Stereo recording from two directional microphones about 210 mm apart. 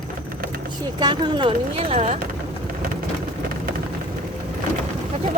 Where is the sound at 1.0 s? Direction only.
20° right (ahead or behind).